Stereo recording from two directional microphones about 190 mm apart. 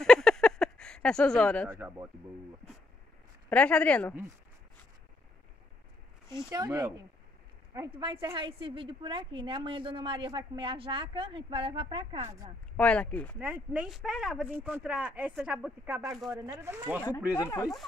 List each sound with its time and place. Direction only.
0.0 s a sound: 5° left (ahead or behind)
1.7 s speech: 15° right (ahead or behind)
3.4 s speech: 5° left (ahead or behind)
6.5 s a woman's voice: 20° right (ahead or behind)
12.7 s speech: 5° left (ahead or behind)
13.4 s speech: 5° right (ahead or behind)
17.4 s speech: 20° left (ahead or behind)